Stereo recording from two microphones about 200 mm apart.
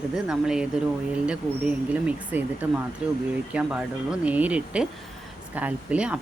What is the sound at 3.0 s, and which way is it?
Cricket, 5° right (ahead or behind).